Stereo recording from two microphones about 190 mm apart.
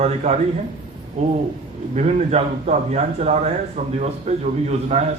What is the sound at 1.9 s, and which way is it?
A man's voice, 35° right (ahead or behind).